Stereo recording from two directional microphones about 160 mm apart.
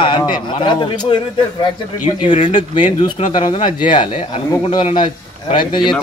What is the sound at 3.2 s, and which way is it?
Speech, 45° left (ahead or behind).